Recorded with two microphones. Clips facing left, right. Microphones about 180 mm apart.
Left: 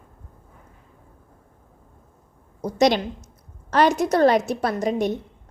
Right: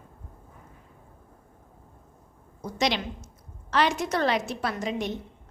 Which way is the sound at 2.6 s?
45° left (ahead or behind).